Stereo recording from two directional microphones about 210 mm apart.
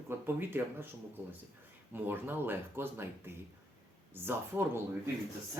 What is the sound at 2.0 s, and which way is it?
Speech, 10° right (ahead or behind).